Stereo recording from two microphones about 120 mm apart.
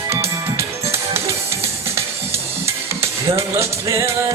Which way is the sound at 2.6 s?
20° right (ahead or behind).